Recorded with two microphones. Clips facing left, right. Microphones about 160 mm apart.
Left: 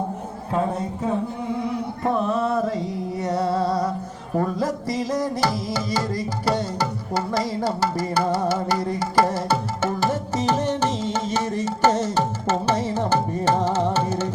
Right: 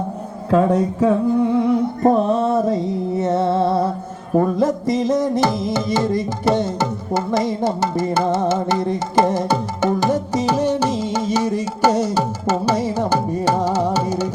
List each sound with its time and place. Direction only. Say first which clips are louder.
0.5 s a man's voice: right 9 dB; 85° right
1.5 s music: right 9 dB; 55° right (ahead or behind); by 14.3 s 10° right (ahead or behind)